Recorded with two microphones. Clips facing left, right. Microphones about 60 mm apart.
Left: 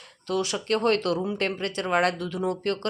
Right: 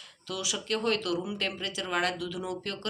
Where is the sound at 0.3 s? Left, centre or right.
Left.